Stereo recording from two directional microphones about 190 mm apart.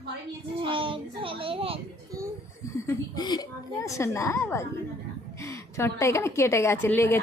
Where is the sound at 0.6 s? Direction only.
25° right (ahead or behind).